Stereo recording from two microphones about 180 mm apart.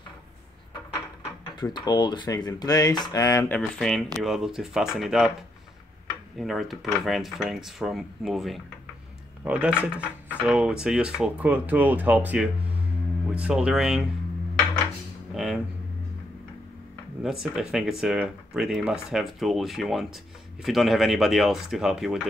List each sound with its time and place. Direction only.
1.6 s speech: 25° left (ahead or behind); by 5.3 s centre (ahead or behind)
6.3 s speech: centre (ahead or behind)
15.3 s a sound: centre (ahead or behind)
17.2 s speech: centre (ahead or behind)